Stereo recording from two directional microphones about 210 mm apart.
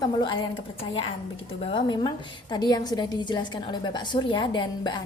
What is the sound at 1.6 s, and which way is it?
A woman's voice, 25° left (ahead or behind).